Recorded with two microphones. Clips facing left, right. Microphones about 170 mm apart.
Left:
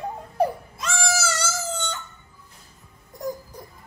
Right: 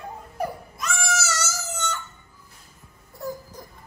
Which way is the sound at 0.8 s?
30° left (ahead or behind).